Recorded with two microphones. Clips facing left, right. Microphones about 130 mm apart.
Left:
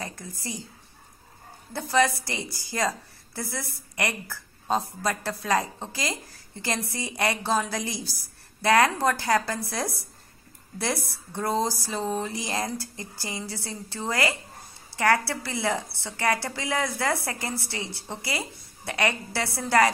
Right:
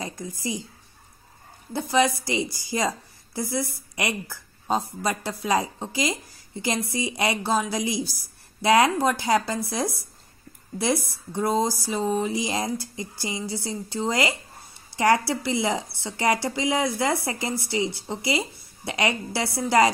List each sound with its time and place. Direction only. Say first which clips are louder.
0.0 s a woman's voice: right 5 dB; 15° right (ahead or behind)
1.7 s a woman's voice: right 1 dB; 15° right (ahead or behind)